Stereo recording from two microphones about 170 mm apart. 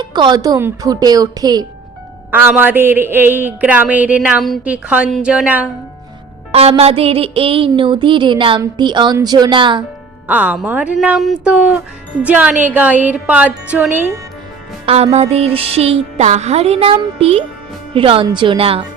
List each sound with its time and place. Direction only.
0.0 s speech: 25° right (ahead or behind)
2.3 s a woman's voice: 10° right (ahead or behind)
6.5 s music: 35° right (ahead or behind)
7.7 s speech: 30° right (ahead or behind)
10.2 s a woman's voice: 10° right (ahead or behind)
14.8 s music: 35° right (ahead or behind)